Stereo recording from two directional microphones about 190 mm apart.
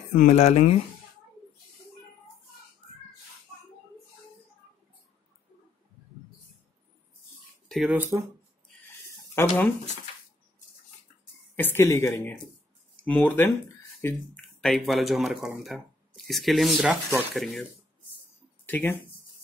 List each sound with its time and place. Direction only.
0.1 s speech: 40° left (ahead or behind)
7.6 s a sound: centre (ahead or behind)
7.9 s speech: 15° right (ahead or behind)
9.0 s chicken: 15° left (ahead or behind)
11.5 s speech: 10° left (ahead or behind)
18.7 s speech: 10° left (ahead or behind)